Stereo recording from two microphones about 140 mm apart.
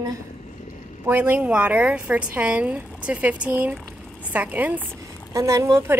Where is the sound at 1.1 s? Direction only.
15° right (ahead or behind).